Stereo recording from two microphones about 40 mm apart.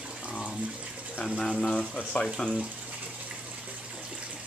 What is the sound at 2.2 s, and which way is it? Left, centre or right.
Speech, left.